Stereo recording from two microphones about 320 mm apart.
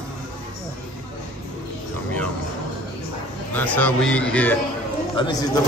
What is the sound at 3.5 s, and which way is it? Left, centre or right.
A man's voice, centre.